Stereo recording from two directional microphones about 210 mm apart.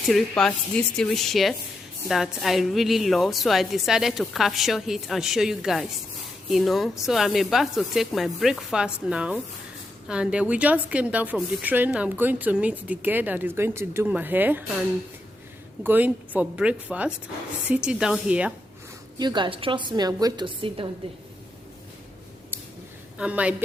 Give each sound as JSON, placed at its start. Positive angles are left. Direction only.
{"t": 0.1, "sound": "a woman's voice", "side_deg": 0}
{"t": 15.8, "sound": "a woman's voice", "side_deg": -10}
{"t": 19.2, "sound": "a woman's voice", "side_deg": -20}
{"t": 23.1, "sound": "a woman's voice", "side_deg": -5}